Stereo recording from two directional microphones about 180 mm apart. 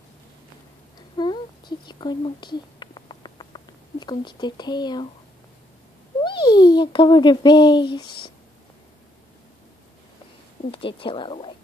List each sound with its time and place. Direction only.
1.1 s a sound: 25° left (ahead or behind)
6.2 s a child's voice: 25° left (ahead or behind)
10.7 s a child's voice: 30° left (ahead or behind)